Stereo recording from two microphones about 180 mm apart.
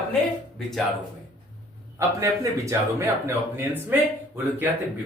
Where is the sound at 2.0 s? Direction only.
15° right (ahead or behind).